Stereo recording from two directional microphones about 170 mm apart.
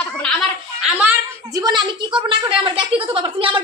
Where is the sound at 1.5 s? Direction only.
25° right (ahead or behind).